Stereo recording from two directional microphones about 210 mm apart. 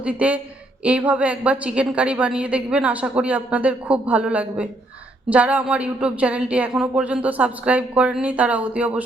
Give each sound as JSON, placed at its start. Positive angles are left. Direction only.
{"t": 0.0, "sound": "a woman's voice", "side_deg": -5}